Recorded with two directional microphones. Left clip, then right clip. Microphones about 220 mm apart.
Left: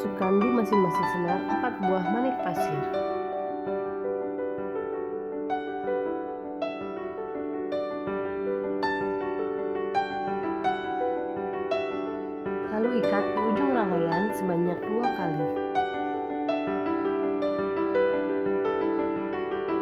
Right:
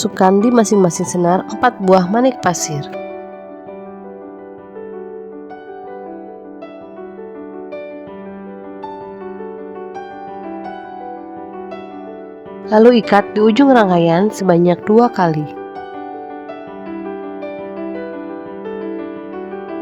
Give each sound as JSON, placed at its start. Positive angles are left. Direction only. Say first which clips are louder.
{"t": 0.2, "sound": "speech", "louder": "right 13 dB", "side_deg": -50}
{"t": 12.6, "sound": "speech", "louder": "right 17 dB", "side_deg": -45}